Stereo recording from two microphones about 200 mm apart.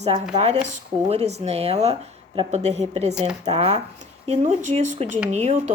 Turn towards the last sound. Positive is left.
turn(degrees=-35)  # may be behind; listen again after turning